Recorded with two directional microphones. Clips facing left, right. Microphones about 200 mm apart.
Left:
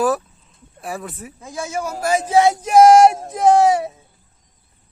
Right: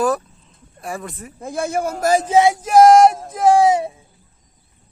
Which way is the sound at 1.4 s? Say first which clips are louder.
Right 5 dB; 55° right (ahead or behind).